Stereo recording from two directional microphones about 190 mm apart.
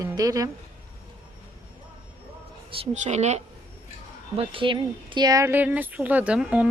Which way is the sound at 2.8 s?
35° right (ahead or behind).